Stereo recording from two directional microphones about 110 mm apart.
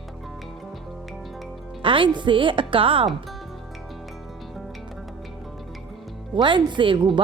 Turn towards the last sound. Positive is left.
turn(degrees=-50)  # may be behind; listen again after turning